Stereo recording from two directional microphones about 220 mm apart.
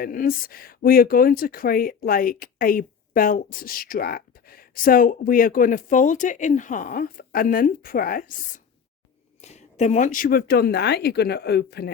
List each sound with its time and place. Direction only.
0.0 s speech: 40° left (ahead or behind)